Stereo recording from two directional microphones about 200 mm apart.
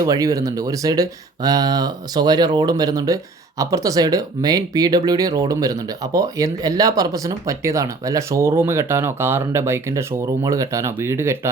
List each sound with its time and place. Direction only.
0.0 s speech: 15° right (ahead or behind)